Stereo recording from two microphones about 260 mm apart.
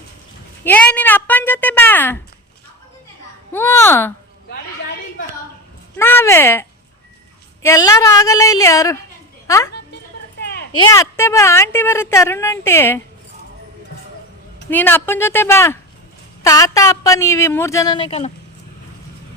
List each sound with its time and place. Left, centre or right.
0.6 s a woman's voice: centre
3.5 s a woman's voice: centre
6.0 s a woman's voice: centre
10.4 s a sound: left
10.8 s a woman's voice: centre
14.7 s a woman's voice: centre